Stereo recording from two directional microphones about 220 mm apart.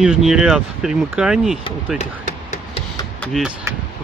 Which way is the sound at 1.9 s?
30° left (ahead or behind).